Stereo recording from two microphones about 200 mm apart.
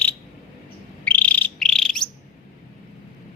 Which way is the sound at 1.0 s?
5° left (ahead or behind).